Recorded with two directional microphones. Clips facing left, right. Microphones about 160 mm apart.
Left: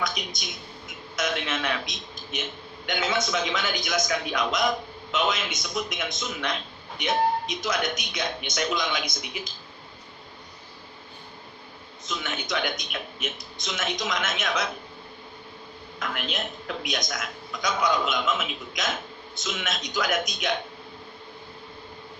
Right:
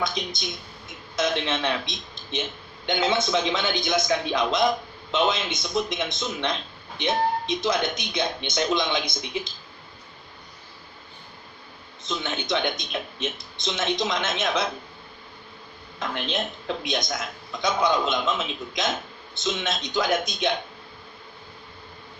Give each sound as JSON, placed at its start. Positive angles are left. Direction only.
{"t": 0.0, "sound": "a man's voice", "side_deg": -30}
{"t": 12.0, "sound": "a man's voice", "side_deg": -30}
{"t": 16.0, "sound": "a man's voice", "side_deg": -30}